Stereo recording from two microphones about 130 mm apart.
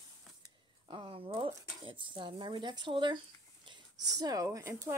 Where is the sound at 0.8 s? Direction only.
45° right (ahead or behind).